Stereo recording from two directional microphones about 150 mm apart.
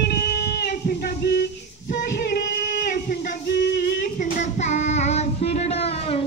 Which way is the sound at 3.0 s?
90° left.